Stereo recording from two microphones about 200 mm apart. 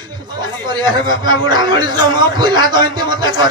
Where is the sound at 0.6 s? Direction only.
20° right (ahead or behind).